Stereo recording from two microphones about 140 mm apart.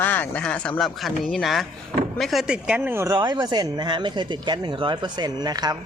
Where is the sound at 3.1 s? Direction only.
30° right (ahead or behind).